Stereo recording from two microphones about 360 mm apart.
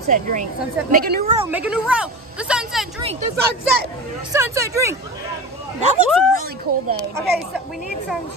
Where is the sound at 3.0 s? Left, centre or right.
Centre.